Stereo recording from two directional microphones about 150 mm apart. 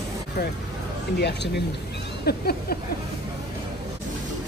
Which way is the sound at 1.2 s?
90° left.